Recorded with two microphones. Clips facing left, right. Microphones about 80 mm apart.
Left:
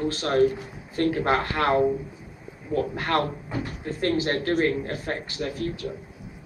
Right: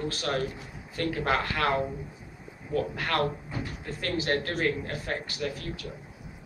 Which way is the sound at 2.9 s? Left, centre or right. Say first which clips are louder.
Left 3 dB; left.